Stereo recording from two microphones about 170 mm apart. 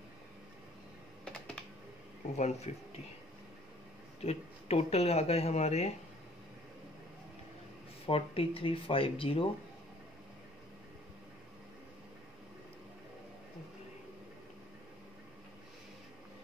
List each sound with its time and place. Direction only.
2.3 s speech: 40° left (ahead or behind)
4.2 s speech: 35° left (ahead or behind)
8.1 s speech: 35° left (ahead or behind)